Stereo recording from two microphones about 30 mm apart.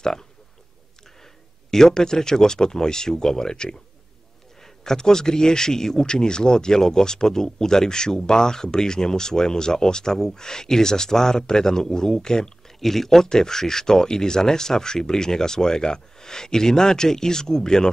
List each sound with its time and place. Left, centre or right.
0.0 s speech: left
1.7 s speech: centre
12.8 s speech: centre